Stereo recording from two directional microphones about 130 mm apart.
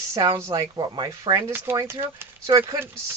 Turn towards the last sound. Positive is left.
turn(degrees=-20)  # may be behind; listen again after turning